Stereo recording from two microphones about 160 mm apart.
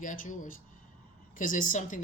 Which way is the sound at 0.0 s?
55° left (ahead or behind).